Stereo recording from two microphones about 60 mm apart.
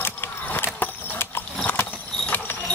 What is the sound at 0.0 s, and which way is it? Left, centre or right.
Vehicle, left.